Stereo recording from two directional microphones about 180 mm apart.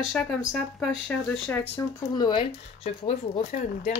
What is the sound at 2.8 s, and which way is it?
Speech, 35° left (ahead or behind).